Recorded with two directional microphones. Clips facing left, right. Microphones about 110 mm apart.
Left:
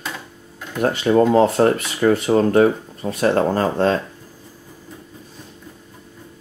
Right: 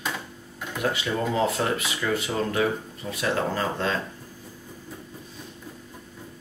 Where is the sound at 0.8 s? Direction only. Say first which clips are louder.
Left 11 dB; 45° left (ahead or behind).